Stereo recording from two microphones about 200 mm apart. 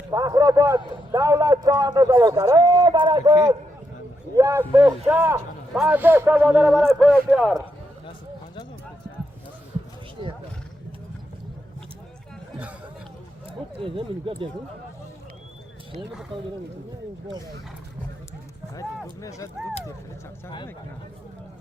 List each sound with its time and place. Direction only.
0.1 s a man's voice: 15° right (ahead or behind)
13.8 s speech: 25° right (ahead or behind)
19.2 s speech: 15° left (ahead or behind)